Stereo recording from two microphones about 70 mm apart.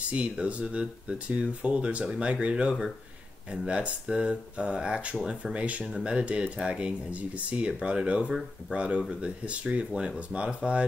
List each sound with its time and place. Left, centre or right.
0.0 s speech: centre